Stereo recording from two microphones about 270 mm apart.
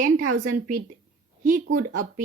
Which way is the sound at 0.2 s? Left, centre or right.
Right.